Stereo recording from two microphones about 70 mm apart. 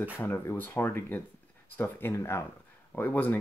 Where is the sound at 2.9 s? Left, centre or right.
Left.